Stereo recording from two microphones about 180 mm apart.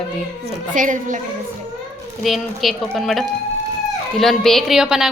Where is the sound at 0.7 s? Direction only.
45° right (ahead or behind).